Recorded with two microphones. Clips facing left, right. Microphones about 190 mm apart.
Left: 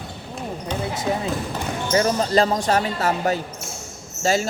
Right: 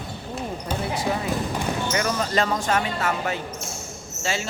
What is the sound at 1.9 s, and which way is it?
Speech, 35° left (ahead or behind).